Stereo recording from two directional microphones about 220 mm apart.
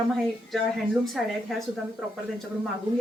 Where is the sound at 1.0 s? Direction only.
Centre (ahead or behind).